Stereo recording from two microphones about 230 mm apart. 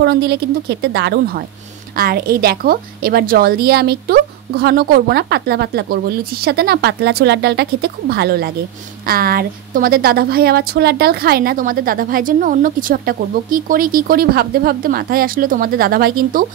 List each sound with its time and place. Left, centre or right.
0.0 s a woman's voice: right